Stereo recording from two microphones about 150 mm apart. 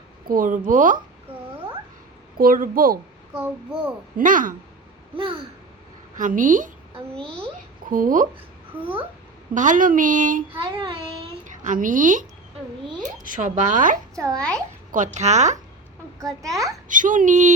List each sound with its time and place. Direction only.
0.3 s speech: 65° right (ahead or behind)
2.4 s speech: 70° right (ahead or behind)
4.2 s speech: 60° right (ahead or behind)
5.1 s babbling: 35° right (ahead or behind)
6.1 s speech: 60° right (ahead or behind)
7.9 s speech: 65° right (ahead or behind)
8.8 s a child's voice: 10° right (ahead or behind)
9.6 s speech: 60° right (ahead or behind)
10.7 s babbling: 30° right (ahead or behind)
11.6 s speech: 60° right (ahead or behind)
14.3 s a child's voice: 5° left (ahead or behind)
14.9 s speech: 55° right (ahead or behind)
16.4 s a child's voice: 20° right (ahead or behind)
16.9 s speech: 60° right (ahead or behind)